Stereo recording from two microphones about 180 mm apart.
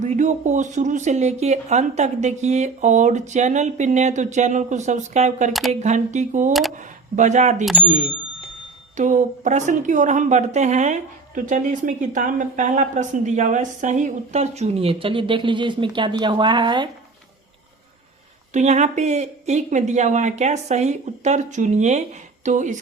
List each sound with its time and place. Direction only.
0.0 s a woman's voice: 40° right (ahead or behind)
6.5 s speech: centre (ahead or behind)
6.7 s speech: 40° right (ahead or behind)
7.6 s speech: centre (ahead or behind)
7.9 s a woman's voice: 40° right (ahead or behind)
18.5 s a woman's voice: 40° right (ahead or behind)